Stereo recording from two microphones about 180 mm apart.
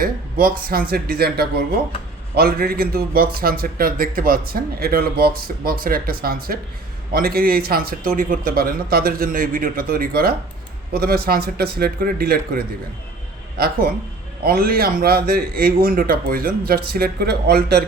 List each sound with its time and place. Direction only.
0.0 s a man's voice: 55° right (ahead or behind)